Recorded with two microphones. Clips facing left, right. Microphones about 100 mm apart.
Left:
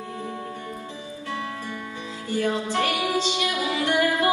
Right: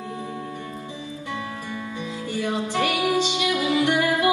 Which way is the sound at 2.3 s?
20° right (ahead or behind).